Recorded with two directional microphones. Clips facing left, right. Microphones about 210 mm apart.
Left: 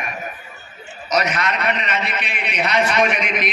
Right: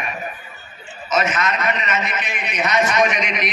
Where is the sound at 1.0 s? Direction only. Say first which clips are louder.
Even; 40° left (ahead or behind).